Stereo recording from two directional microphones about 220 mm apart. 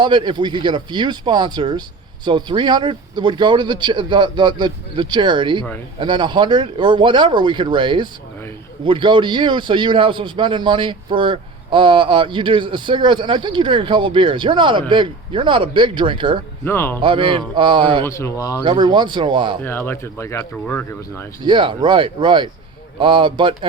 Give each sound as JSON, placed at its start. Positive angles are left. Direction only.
{"t": 0.0, "sound": "a man's voice", "side_deg": -20}
{"t": 16.6, "sound": "speech", "side_deg": 10}
{"t": 17.0, "sound": "a man's voice", "side_deg": -25}
{"t": 18.0, "sound": "speech", "side_deg": 10}
{"t": 18.6, "sound": "a man's voice", "side_deg": -20}
{"t": 19.6, "sound": "speech", "side_deg": 10}
{"t": 21.4, "sound": "a man's voice", "side_deg": -20}